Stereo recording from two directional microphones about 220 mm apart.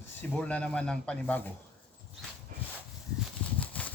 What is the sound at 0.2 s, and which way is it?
Speech, 5° left (ahead or behind).